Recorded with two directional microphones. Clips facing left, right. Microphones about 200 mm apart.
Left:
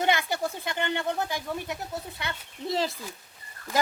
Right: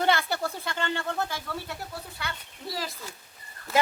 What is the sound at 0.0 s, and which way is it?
Speech, 15° left (ahead or behind).